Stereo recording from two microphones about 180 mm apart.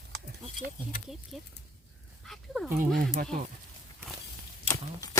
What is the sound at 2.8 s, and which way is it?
Speech, 50° right (ahead or behind).